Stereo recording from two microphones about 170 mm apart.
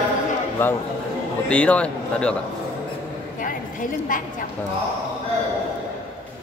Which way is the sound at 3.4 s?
50° left (ahead or behind).